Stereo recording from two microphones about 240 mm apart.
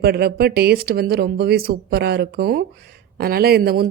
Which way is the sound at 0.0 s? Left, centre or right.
Right.